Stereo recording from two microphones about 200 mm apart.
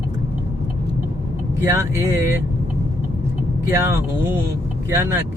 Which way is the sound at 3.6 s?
10° right (ahead or behind).